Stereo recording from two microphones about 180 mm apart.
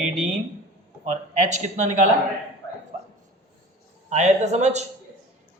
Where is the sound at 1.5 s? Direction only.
40° right (ahead or behind).